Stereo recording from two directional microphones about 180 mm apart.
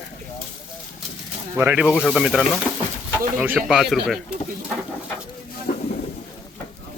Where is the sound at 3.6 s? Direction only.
Centre (ahead or behind).